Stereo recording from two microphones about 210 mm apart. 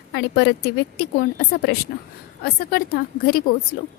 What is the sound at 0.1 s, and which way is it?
Speech, 55° left (ahead or behind).